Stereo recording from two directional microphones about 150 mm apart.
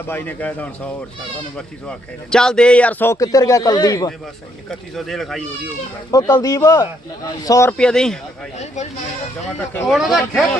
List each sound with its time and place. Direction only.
0.1 s a man's voice: 10° left (ahead or behind)
4.7 s speech: centre (ahead or behind)
6.1 s a man's voice: 25° left (ahead or behind)
7.8 s speech: 5° left (ahead or behind)
8.5 s speech: 50° left (ahead or behind)
9.9 s speech: centre (ahead or behind)